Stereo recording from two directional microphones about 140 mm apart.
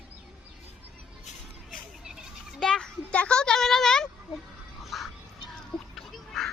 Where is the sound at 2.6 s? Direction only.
5° left (ahead or behind).